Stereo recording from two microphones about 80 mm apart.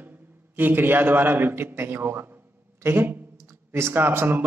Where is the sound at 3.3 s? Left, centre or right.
Right.